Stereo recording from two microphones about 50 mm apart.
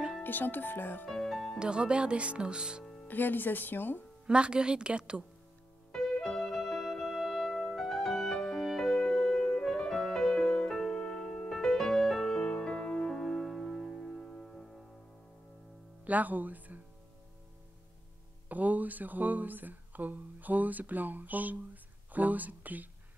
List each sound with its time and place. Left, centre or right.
0.2 s speech: left
1.0 s music: centre
1.6 s speech: centre
3.1 s speech: left
4.3 s speech: centre
5.9 s music: centre
14.1 s music: centre
16.0 s music: right
18.5 s speech: right